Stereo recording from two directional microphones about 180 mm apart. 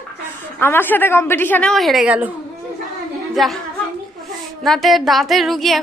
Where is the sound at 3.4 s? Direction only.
Centre (ahead or behind).